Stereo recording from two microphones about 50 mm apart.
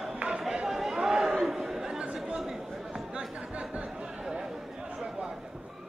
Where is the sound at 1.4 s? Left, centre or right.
Centre.